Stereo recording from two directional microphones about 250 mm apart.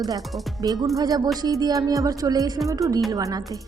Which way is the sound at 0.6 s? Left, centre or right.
Centre.